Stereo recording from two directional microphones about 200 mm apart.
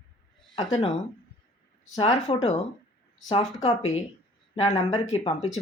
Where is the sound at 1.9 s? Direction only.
25° left (ahead or behind).